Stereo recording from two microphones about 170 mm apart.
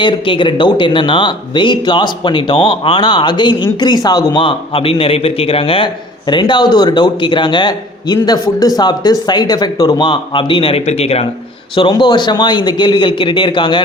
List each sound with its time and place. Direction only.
0.0 s a man's voice: 30° left (ahead or behind)